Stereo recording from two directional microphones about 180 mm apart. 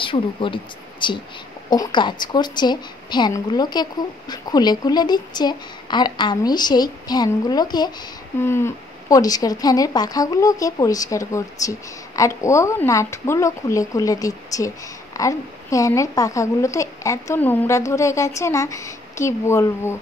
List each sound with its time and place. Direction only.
0.0 s a woman's voice: 30° left (ahead or behind)